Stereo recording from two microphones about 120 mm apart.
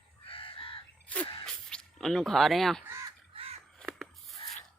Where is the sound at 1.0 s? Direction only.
10° left (ahead or behind).